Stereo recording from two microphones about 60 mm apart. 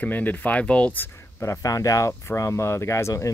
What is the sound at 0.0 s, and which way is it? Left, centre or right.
Speech, left.